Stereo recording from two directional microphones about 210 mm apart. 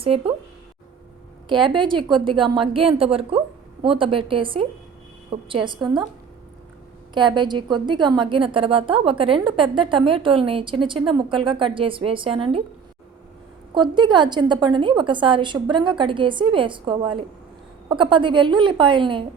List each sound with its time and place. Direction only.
0.0 s a woman's voice: 25° right (ahead or behind)
1.5 s a woman's voice: 20° right (ahead or behind)
7.1 s a woman's voice: 20° right (ahead or behind)
13.7 s a woman's voice: 20° right (ahead or behind)